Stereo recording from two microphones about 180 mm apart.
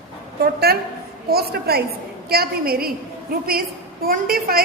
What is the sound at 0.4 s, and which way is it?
A woman's voice, 60° right (ahead or behind).